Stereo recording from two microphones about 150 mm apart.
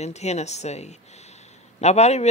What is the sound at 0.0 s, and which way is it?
Speech, 45° left (ahead or behind).